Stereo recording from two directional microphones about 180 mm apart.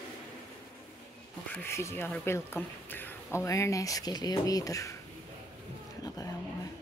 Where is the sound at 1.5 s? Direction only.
15° left (ahead or behind).